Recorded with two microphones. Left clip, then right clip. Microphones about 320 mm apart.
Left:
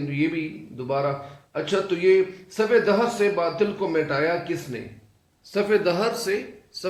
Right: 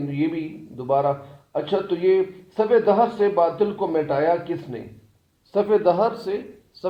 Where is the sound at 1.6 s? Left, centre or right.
Centre.